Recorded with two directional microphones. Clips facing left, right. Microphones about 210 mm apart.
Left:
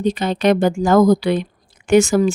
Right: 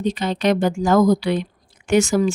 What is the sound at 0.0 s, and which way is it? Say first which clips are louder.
A woman's voice: left 3 dB; 50° left (ahead or behind).